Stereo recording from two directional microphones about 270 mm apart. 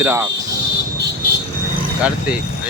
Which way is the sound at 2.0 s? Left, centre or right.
Centre.